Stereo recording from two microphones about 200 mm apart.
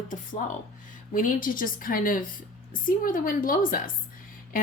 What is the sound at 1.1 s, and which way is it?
Speech, 45° left (ahead or behind).